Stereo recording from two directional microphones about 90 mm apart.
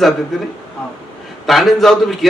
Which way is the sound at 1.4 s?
Centre (ahead or behind).